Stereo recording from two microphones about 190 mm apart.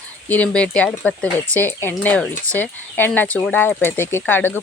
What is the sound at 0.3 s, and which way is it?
Speech, 5° left (ahead or behind).